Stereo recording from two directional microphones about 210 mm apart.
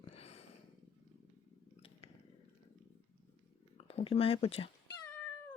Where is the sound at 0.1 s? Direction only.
30° left (ahead or behind).